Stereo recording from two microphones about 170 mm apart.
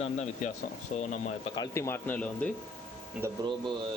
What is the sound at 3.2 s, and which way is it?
Speech, 25° right (ahead or behind).